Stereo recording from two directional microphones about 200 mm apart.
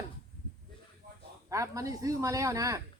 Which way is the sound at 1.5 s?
15° right (ahead or behind).